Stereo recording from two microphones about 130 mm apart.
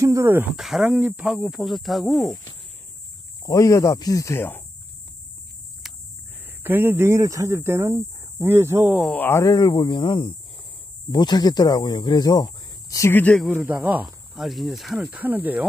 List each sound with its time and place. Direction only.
0.0 s speech: 20° right (ahead or behind)
0.6 s speech: centre (ahead or behind)
3.4 s speech: 25° left (ahead or behind)
5.8 s a sound: 5° right (ahead or behind)
6.6 s speech: 15° right (ahead or behind)
9.1 s speech: 15° left (ahead or behind)
13.2 s speech: 10° left (ahead or behind)
13.7 s speech: 10° right (ahead or behind)